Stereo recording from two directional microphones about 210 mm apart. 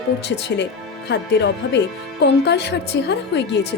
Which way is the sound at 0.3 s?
55° left (ahead or behind).